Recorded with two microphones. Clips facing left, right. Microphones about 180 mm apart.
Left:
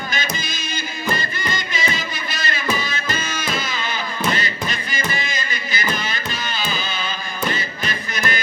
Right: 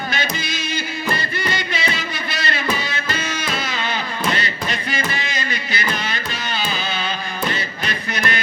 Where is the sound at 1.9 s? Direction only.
65° right (ahead or behind).